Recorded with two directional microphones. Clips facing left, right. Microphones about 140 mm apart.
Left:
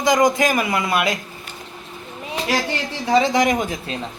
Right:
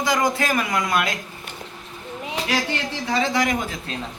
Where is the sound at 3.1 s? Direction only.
20° left (ahead or behind).